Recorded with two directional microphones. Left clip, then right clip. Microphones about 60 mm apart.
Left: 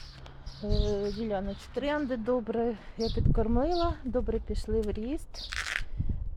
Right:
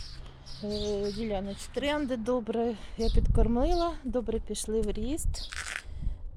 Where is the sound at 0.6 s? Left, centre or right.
Right.